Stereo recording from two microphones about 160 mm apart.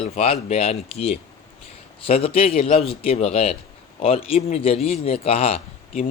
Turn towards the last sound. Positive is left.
turn(degrees=40)  # may be behind; listen again after turning